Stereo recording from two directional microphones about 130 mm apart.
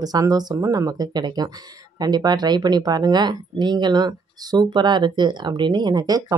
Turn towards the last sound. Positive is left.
turn(degrees=-30)  # may be behind; listen again after turning